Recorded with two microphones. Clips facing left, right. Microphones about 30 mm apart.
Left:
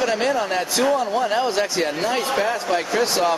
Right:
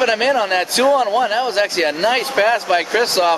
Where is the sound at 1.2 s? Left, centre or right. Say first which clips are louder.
Right 3 dB; right.